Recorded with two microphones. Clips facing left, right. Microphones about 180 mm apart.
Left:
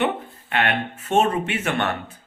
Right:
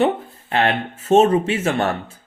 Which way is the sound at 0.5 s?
30° right (ahead or behind).